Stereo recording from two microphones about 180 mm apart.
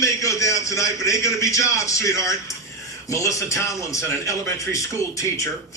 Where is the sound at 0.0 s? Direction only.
15° left (ahead or behind).